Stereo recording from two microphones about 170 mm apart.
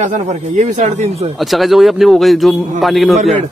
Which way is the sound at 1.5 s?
Centre (ahead or behind).